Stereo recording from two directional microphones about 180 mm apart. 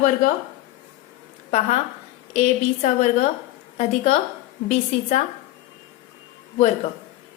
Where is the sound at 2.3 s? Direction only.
40° left (ahead or behind).